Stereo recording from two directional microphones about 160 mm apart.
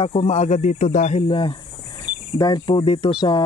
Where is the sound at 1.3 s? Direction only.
30° left (ahead or behind).